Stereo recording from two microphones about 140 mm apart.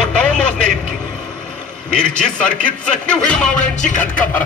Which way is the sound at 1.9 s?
5° left (ahead or behind).